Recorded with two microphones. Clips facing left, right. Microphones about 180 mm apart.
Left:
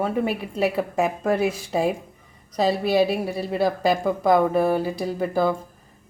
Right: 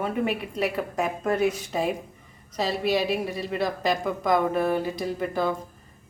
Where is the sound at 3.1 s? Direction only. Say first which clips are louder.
Left 2 dB; 35° left (ahead or behind).